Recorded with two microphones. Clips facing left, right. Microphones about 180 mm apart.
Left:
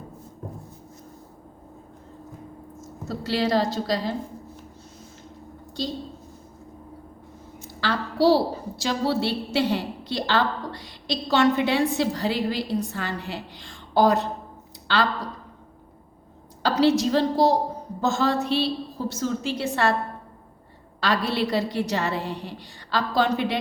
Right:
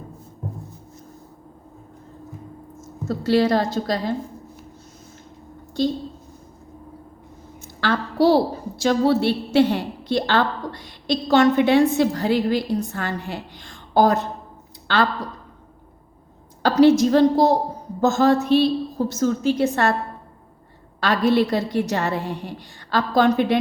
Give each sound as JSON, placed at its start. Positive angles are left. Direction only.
{"t": 3.1, "sound": "a woman's voice", "side_deg": -50}
{"t": 7.6, "sound": "a sound", "side_deg": -50}
{"t": 8.8, "sound": "a woman's voice", "side_deg": -55}
{"t": 16.6, "sound": "a woman's voice", "side_deg": -50}
{"t": 21.0, "sound": "a woman's voice", "side_deg": -45}